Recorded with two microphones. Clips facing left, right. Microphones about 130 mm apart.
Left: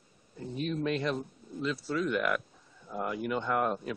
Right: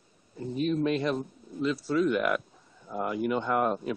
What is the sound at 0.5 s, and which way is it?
Speech, 5° right (ahead or behind).